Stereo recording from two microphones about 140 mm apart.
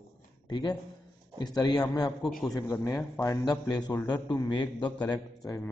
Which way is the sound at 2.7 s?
20° left (ahead or behind).